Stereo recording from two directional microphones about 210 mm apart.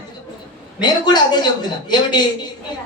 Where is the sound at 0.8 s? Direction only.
20° left (ahead or behind).